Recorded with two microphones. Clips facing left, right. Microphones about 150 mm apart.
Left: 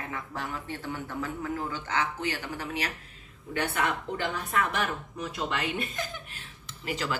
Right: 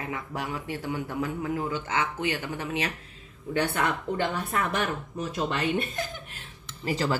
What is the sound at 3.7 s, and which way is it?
Speech, 35° right (ahead or behind).